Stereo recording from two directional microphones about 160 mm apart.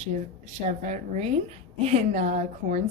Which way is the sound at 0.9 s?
50° right (ahead or behind).